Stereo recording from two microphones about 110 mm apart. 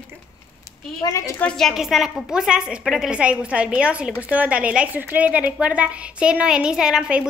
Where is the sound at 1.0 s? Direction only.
30° left (ahead or behind).